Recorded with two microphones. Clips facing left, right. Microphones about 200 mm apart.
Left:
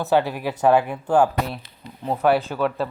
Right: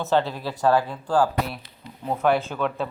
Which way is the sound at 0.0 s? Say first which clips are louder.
Left 3 dB; 15° left (ahead or behind).